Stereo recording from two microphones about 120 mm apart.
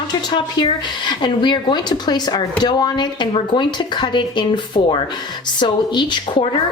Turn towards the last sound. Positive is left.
turn(degrees=40)  # may be behind; listen again after turning